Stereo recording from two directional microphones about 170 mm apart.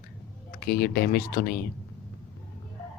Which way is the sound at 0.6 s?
65° left (ahead or behind).